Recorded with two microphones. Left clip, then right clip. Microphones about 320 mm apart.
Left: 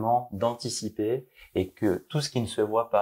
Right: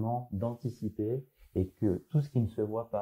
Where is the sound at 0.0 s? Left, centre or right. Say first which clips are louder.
Left 10 dB; centre.